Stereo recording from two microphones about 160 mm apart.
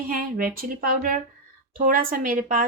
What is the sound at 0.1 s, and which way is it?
Speech, 60° right (ahead or behind).